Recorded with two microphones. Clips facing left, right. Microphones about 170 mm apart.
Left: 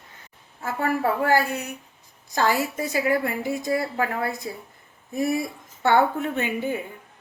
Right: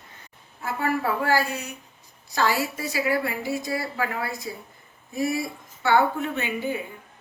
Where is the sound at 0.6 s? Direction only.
50° left (ahead or behind).